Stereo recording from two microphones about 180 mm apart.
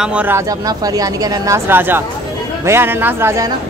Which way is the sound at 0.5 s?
20° right (ahead or behind).